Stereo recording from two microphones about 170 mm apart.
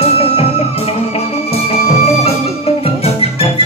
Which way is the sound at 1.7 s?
35° left (ahead or behind).